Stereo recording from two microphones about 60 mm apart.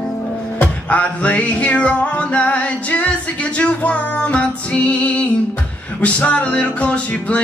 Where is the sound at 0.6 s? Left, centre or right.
Left.